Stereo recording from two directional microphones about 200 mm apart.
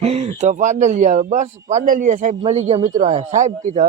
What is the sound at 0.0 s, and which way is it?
A man's voice, 30° right (ahead or behind).